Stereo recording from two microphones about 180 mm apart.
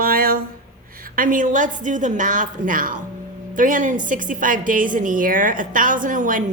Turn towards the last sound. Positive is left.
turn(degrees=-45)  # may be behind; listen again after turning